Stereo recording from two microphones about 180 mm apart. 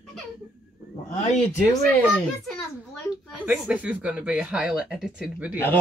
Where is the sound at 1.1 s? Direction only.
40° left (ahead or behind).